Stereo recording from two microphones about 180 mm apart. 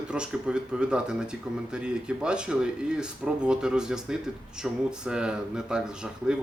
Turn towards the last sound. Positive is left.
turn(degrees=-5)  # may be behind; listen again after turning